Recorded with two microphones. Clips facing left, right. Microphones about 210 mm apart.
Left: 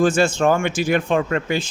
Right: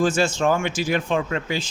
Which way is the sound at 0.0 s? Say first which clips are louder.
Left 3 dB; 55° left (ahead or behind).